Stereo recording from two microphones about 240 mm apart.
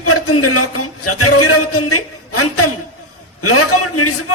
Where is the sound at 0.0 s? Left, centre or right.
Left.